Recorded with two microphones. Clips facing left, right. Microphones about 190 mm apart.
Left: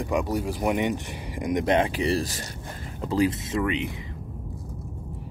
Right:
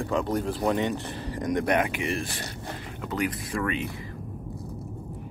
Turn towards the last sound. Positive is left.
turn(degrees=20)  # may be behind; listen again after turning